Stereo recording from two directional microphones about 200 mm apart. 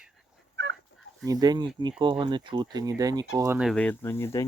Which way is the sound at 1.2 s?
20° right (ahead or behind).